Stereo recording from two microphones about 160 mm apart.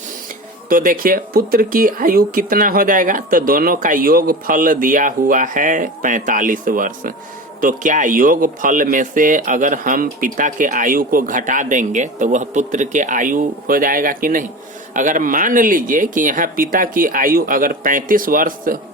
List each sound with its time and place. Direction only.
0.7 s speech: 60° right (ahead or behind)